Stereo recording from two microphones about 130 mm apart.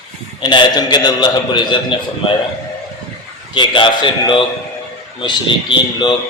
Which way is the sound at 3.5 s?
40° left (ahead or behind).